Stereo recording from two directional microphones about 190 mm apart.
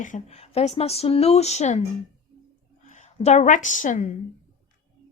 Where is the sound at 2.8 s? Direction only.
40° left (ahead or behind).